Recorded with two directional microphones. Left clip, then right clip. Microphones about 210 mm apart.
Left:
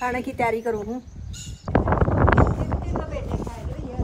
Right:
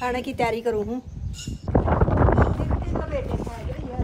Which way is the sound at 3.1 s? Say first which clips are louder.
Right 3 dB; centre (ahead or behind).